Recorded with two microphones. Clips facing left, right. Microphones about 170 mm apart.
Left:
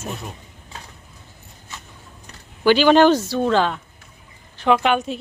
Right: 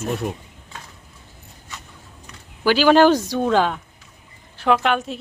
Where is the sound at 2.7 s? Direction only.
5° right (ahead or behind).